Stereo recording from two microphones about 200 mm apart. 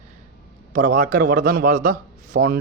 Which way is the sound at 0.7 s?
45° right (ahead or behind).